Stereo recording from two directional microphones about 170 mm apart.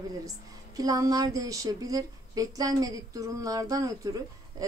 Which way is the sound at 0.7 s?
20° right (ahead or behind).